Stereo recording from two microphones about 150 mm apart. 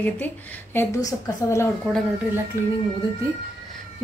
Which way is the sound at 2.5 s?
20° right (ahead or behind).